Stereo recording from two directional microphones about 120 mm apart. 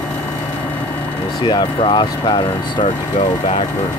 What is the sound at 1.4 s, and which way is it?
Speech, 40° left (ahead or behind).